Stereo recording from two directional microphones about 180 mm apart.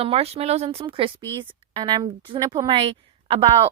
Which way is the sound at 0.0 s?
35° right (ahead or behind).